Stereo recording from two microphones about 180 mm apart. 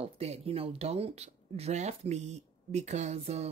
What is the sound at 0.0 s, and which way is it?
Speech, 35° right (ahead or behind).